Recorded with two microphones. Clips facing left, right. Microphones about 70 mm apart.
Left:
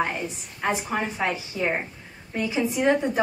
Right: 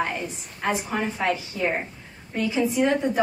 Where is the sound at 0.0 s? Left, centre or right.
Centre.